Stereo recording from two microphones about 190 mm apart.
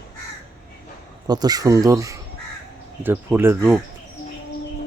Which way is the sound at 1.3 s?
20° right (ahead or behind).